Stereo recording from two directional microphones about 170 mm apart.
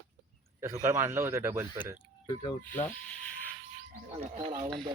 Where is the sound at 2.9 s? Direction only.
5° left (ahead or behind).